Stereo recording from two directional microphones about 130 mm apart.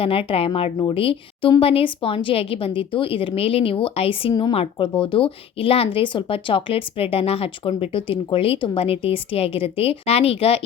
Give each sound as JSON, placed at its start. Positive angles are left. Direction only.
{"t": 0.0, "sound": "speech", "side_deg": 45}